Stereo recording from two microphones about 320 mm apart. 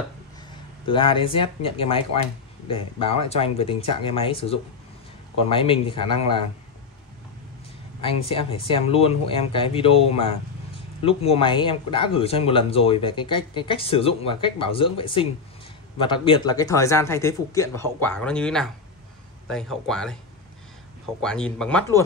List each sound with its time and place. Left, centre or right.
0.8 s speech: centre
8.0 s speech: centre
21.2 s speech: centre